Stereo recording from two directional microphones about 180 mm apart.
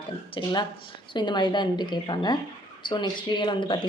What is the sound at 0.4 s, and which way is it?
Speech, 25° left (ahead or behind).